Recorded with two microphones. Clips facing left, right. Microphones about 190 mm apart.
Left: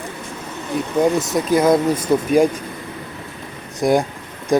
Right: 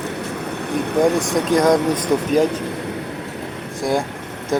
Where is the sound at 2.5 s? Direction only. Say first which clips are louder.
Right 6 dB; 70° right (ahead or behind).